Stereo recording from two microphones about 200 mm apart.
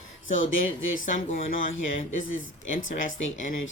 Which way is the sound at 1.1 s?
40° left (ahead or behind).